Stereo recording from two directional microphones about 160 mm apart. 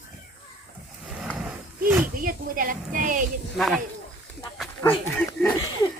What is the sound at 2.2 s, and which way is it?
A woman's voice, 60° right (ahead or behind).